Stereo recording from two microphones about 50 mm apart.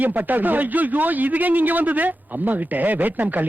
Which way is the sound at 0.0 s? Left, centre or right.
Right.